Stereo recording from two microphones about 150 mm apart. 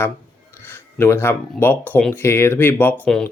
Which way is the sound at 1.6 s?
15° left (ahead or behind).